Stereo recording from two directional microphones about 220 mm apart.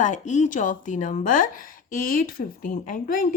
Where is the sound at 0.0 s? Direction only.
35° left (ahead or behind).